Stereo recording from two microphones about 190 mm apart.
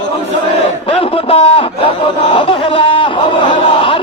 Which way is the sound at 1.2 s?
30° left (ahead or behind).